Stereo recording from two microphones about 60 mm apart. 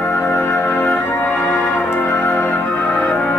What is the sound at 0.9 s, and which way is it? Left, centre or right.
Brass instrument, left.